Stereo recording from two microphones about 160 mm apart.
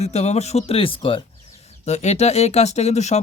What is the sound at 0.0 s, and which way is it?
Speech, 40° left (ahead or behind).